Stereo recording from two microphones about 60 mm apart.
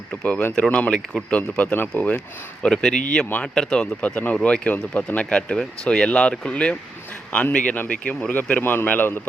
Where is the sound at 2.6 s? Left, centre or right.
Centre.